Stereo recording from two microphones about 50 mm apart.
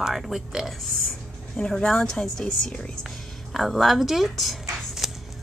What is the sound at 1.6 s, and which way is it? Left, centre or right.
A woman's voice, centre.